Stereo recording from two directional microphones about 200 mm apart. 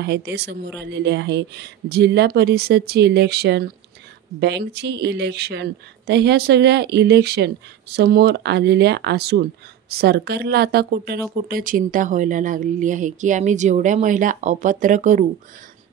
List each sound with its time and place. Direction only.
0.0 s speech: 55° right (ahead or behind); by 15.2 s 40° right (ahead or behind)